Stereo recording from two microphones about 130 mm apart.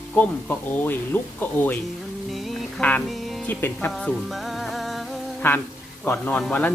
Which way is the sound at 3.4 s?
15° left (ahead or behind).